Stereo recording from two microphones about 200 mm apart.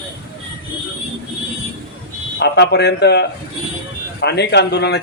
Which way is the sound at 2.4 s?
55° left (ahead or behind).